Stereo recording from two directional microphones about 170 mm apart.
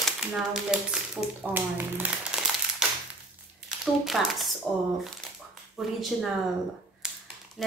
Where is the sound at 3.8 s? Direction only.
Centre (ahead or behind).